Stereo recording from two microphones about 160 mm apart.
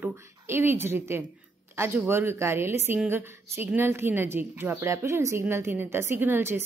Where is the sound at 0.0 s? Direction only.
15° right (ahead or behind).